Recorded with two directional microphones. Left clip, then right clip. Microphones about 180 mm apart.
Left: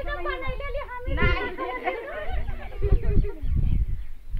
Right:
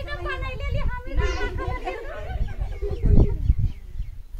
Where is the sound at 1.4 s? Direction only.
40° left (ahead or behind).